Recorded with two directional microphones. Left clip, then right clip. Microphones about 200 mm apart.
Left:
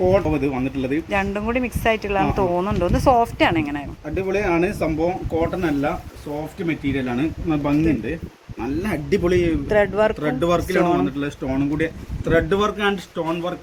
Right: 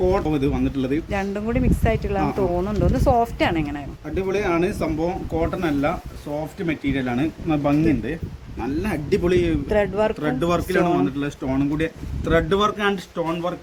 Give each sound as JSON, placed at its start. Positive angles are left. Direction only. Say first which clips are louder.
{"t": 0.3, "sound": "speech", "louder": "even", "side_deg": -10}
{"t": 6.7, "sound": "speech", "louder": "left 1 dB", "side_deg": -25}
{"t": 8.6, "sound": "speech", "louder": "left 1 dB", "side_deg": -5}
{"t": 9.6, "sound": "speech", "louder": "left 3 dB", "side_deg": 0}
{"t": 10.2, "sound": "speech", "louder": "left 2 dB", "side_deg": -15}